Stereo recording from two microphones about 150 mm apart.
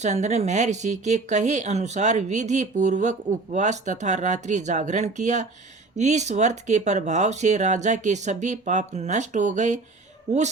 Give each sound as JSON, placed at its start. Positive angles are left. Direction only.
{"t": 0.0, "sound": "speech", "side_deg": -50}